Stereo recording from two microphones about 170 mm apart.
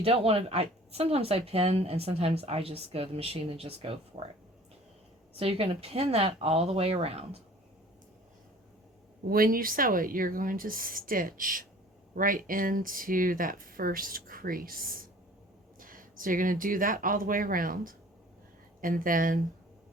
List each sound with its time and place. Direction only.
0.0 s speech: 35° right (ahead or behind)
5.4 s speech: 35° right (ahead or behind)
9.3 s speech: 55° right (ahead or behind)